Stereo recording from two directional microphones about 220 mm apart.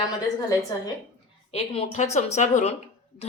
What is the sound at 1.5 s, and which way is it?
Speech, 30° left (ahead or behind).